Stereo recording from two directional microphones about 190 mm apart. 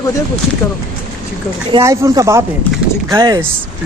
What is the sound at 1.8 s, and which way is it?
Speech, 15° right (ahead or behind).